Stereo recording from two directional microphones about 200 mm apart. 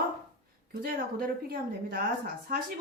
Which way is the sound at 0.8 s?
50° right (ahead or behind).